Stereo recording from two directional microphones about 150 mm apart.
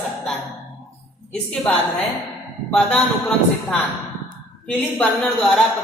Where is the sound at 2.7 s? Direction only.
10° left (ahead or behind).